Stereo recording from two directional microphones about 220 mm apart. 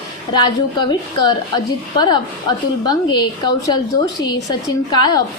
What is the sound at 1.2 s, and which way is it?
A woman's voice, 20° left (ahead or behind).